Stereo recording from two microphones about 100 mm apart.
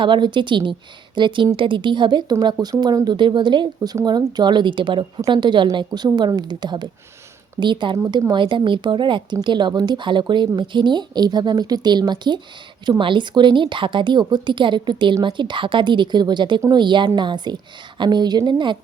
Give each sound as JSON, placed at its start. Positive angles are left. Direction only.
{"t": 0.0, "sound": "speech", "side_deg": -55}